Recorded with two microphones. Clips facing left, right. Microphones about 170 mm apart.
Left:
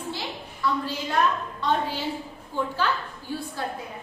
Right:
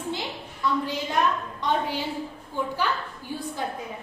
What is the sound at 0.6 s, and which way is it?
A woman's voice, 20° right (ahead or behind).